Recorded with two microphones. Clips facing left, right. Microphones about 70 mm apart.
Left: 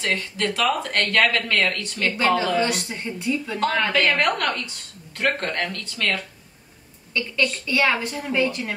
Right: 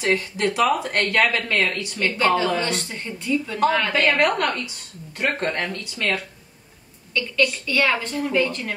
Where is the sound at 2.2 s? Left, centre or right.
Centre.